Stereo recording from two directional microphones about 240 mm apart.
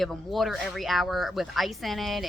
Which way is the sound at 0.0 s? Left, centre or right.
Centre.